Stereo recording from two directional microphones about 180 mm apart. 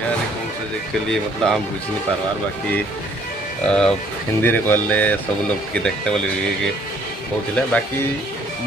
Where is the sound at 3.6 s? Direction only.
5° left (ahead or behind).